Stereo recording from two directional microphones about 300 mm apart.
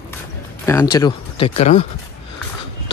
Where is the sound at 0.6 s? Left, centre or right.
Centre.